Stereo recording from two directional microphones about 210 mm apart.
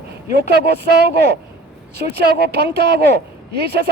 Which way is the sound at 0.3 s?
50° right (ahead or behind).